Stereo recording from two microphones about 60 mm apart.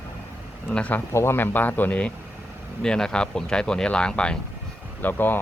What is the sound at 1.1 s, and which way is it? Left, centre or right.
Speech, left.